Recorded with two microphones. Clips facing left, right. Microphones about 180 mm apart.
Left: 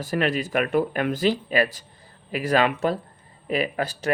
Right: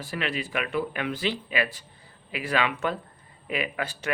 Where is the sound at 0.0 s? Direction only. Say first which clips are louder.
Left 7 dB; 45° left (ahead or behind).